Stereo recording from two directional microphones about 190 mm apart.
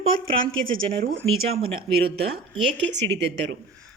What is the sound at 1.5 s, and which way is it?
Speech, 30° right (ahead or behind).